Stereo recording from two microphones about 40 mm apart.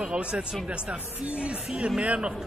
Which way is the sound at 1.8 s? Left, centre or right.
Right.